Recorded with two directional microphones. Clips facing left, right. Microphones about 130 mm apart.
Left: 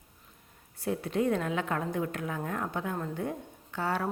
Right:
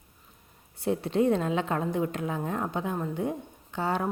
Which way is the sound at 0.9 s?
25° right (ahead or behind).